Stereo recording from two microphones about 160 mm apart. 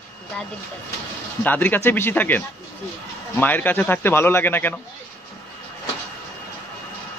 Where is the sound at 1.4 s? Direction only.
10° left (ahead or behind).